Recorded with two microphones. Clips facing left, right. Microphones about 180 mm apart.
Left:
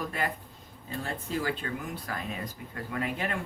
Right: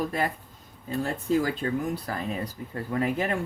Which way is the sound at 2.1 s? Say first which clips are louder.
Right 5 dB; 40° right (ahead or behind).